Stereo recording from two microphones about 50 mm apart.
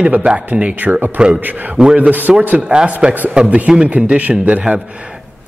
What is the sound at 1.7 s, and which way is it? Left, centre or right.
Speech, centre.